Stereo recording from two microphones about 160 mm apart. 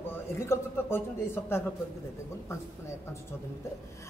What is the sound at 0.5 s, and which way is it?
A man's voice, 15° left (ahead or behind).